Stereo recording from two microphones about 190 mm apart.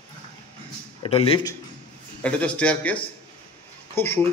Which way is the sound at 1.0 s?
30° left (ahead or behind).